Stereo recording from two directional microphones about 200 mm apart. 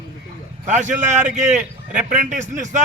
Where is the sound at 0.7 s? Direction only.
40° right (ahead or behind).